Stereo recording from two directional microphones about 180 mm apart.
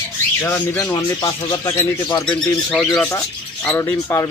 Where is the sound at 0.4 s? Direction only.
10° left (ahead or behind).